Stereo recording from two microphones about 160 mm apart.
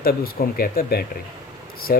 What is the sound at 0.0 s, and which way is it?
Speech, 65° left (ahead or behind).